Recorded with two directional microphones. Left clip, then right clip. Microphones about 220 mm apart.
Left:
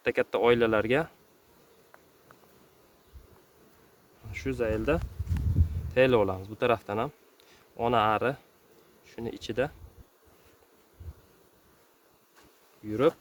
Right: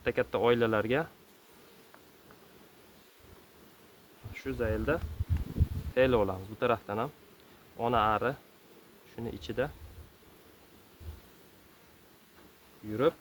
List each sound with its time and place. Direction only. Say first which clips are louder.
0.0 s speech: left 3 dB; 55° left (ahead or behind)
4.4 s speech: left 4 dB; 55° left (ahead or behind)
12.9 s speech: left 3 dB; 55° left (ahead or behind)